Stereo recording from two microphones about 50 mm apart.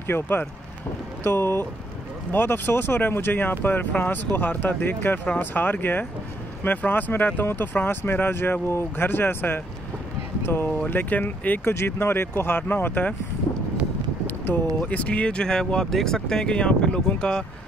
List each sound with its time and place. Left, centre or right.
0.0 s speech: left
2.3 s speech: left
10.7 s speech: left
11.7 s speech: left
14.9 s speech: left